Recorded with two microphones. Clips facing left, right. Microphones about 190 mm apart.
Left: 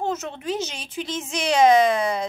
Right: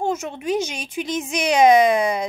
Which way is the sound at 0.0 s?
10° right (ahead or behind).